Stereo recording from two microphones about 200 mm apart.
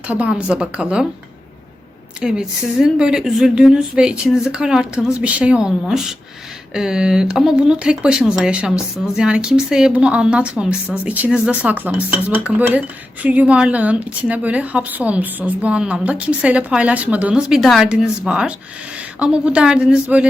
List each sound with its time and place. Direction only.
0.1 s speech: 5° right (ahead or behind)
2.2 s speech: 5° right (ahead or behind)